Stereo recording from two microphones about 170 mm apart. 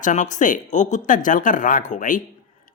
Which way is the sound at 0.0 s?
45° left (ahead or behind).